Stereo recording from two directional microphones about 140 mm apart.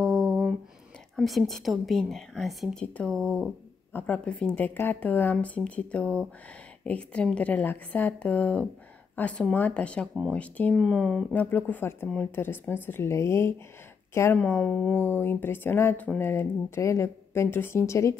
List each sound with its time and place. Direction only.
0.0 s a sound: 5° left (ahead or behind)
1.1 s a woman's voice: centre (ahead or behind)
3.1 s speech: 20° right (ahead or behind)
3.9 s a woman's voice: 10° left (ahead or behind)
11.3 s speech: 10° left (ahead or behind)
14.4 s speech: 5° left (ahead or behind)